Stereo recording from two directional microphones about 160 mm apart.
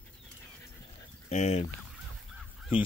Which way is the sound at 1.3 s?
45° left (ahead or behind).